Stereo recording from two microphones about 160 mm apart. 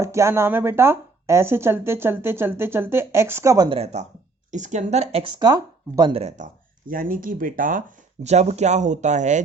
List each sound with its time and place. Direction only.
0.0 s speech: 20° right (ahead or behind)
3.7 s speech: 40° right (ahead or behind)